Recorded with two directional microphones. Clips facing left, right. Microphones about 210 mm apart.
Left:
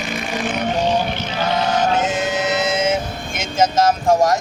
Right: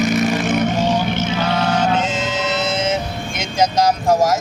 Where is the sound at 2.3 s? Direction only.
15° left (ahead or behind).